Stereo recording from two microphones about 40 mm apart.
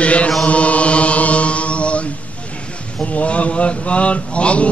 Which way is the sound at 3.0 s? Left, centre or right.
Left.